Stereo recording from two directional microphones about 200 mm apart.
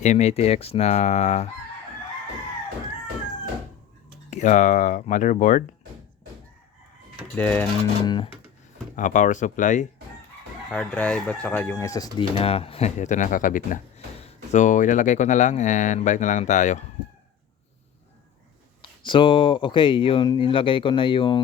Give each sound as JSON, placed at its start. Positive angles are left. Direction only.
{"t": 0.0, "sound": "speech", "side_deg": 35}
{"t": 4.3, "sound": "speech", "side_deg": 35}
{"t": 7.3, "sound": "speech", "side_deg": 10}
{"t": 8.0, "sound": "speech", "side_deg": 20}
{"t": 9.0, "sound": "speech", "side_deg": 40}
{"t": 10.7, "sound": "speech", "side_deg": 5}
{"t": 18.8, "sound": "speech", "side_deg": 25}